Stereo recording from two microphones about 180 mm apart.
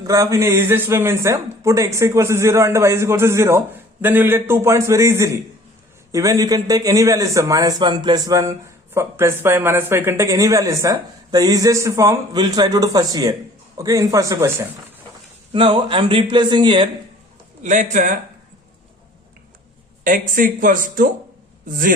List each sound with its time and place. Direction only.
0.0 s a man's voice: 20° right (ahead or behind)
15.5 s a man's voice: 30° right (ahead or behind)
17.6 s speech: 45° right (ahead or behind)
20.1 s speech: 50° right (ahead or behind)